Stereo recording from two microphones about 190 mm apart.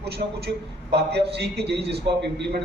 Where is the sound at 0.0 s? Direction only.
60° right (ahead or behind).